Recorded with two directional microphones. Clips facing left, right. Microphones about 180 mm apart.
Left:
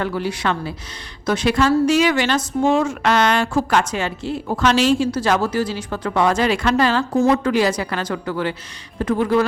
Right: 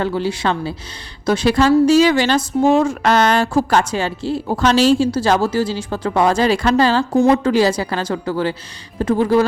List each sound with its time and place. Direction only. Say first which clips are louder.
0.0 s speech: right 3 dB; 30° right (ahead or behind)